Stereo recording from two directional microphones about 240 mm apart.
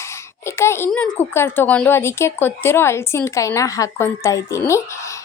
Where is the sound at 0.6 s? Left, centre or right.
Centre.